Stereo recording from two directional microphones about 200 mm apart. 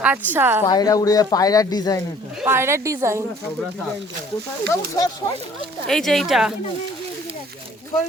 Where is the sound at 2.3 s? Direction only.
10° right (ahead or behind).